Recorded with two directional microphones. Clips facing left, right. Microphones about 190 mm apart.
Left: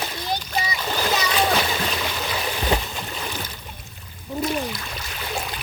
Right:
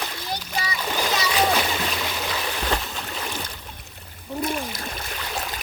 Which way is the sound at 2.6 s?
5° left (ahead or behind).